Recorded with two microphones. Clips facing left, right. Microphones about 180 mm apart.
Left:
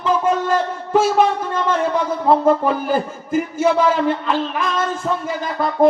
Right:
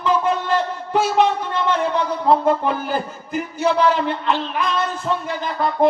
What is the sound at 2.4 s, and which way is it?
Speech, 45° left (ahead or behind).